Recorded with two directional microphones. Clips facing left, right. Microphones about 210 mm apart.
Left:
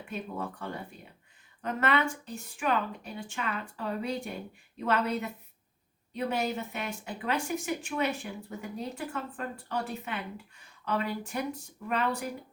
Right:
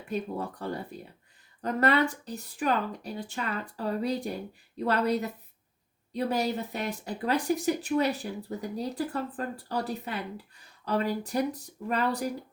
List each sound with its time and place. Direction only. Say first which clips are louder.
0.1 s speech: right 5 dB; 35° right (ahead or behind)